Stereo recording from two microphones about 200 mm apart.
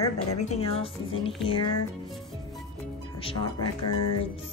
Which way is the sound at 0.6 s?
30° left (ahead or behind).